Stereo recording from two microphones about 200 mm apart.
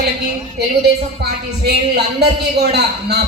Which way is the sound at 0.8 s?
55° right (ahead or behind).